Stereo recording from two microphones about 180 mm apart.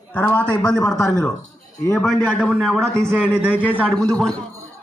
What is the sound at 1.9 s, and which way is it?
Speech, centre (ahead or behind).